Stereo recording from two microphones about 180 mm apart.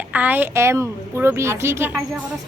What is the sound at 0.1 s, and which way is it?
A woman's voice, 10° right (ahead or behind).